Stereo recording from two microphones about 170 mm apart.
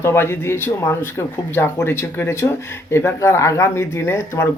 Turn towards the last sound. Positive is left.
turn(degrees=15)  # may be behind; listen again after turning